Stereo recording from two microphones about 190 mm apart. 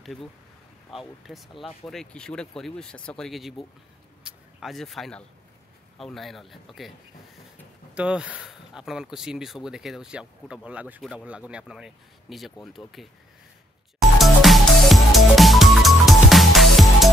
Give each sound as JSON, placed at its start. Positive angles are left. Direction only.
{"t": 0.0, "sound": "speech", "side_deg": 0}
{"t": 7.9, "sound": "speech", "side_deg": -5}
{"t": 14.1, "sound": "music", "side_deg": 0}